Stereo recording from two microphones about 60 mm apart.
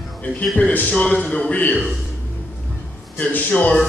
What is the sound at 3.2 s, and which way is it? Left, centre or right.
Speech, left.